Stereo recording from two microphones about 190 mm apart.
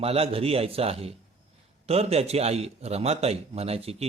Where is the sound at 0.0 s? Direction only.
30° right (ahead or behind).